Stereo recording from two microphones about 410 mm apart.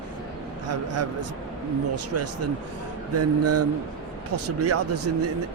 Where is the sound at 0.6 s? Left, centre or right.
Right.